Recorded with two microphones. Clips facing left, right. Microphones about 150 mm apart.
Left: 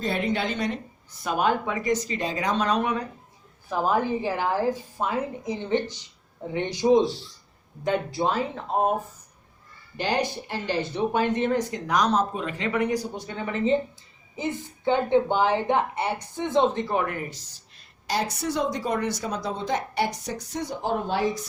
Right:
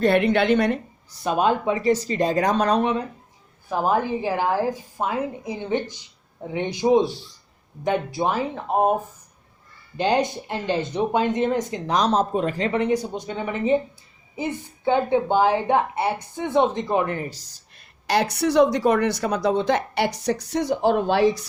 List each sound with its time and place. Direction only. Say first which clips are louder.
0.0 s a woman's voice: right 8 dB; 65° right (ahead or behind)
1.2 s speech: right 3 dB; 25° right (ahead or behind); by 2.8 s 40° right (ahead or behind)
3.7 s a woman's voice: right 2 dB; 15° right (ahead or behind)
10.0 s a woman's voice: right 5 dB; 20° right (ahead or behind)
17.2 s speech: right 4 dB; 35° right (ahead or behind)
17.7 s speech: right 6 dB; 65° right (ahead or behind)